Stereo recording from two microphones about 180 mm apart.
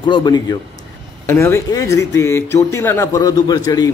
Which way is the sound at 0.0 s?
25° left (ahead or behind).